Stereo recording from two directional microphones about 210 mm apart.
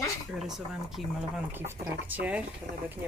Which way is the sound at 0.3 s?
Centre (ahead or behind).